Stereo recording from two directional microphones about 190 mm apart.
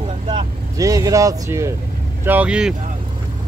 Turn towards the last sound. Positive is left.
turn(degrees=-5)  # may be behind; listen again after turning